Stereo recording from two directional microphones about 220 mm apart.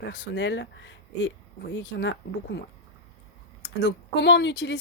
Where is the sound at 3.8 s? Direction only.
50° left (ahead or behind).